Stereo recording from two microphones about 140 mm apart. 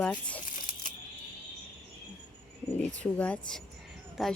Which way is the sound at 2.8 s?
10° left (ahead or behind).